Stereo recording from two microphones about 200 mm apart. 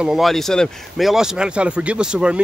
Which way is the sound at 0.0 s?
Centre (ahead or behind).